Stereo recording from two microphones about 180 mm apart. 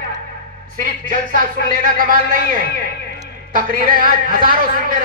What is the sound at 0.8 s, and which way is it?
Speech, 45° right (ahead or behind).